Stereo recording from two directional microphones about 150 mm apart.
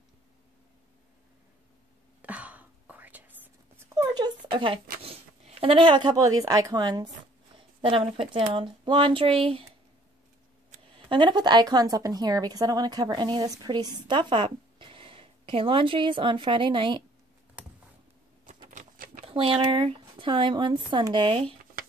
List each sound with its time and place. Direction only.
2.2 s whispering: 10° right (ahead or behind)
3.9 s a sound: 25° right (ahead or behind)
5.0 s speech: 40° right (ahead or behind)
11.1 s speech: 30° right (ahead or behind)
18.7 s typewriter: 60° right (ahead or behind)
19.2 s speech: 35° right (ahead or behind)